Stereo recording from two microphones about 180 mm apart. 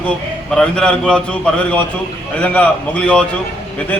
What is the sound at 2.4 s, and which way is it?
Speech, 10° left (ahead or behind).